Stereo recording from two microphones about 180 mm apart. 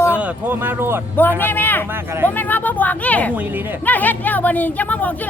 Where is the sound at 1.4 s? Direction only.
10° left (ahead or behind).